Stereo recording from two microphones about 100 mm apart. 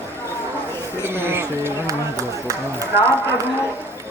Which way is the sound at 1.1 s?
25° right (ahead or behind).